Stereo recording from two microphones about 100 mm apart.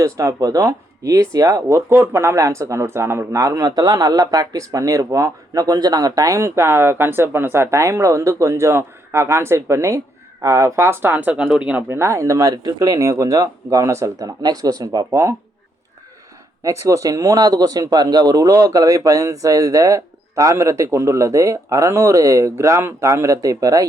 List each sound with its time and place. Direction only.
0.0 s speech: 35° right (ahead or behind)
1.6 s speech: 25° right (ahead or behind)
11.9 s speech: 30° right (ahead or behind)
16.6 s speech: 30° right (ahead or behind)